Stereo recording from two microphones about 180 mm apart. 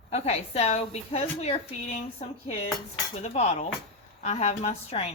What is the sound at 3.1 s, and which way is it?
A woman's voice, 35° left (ahead or behind).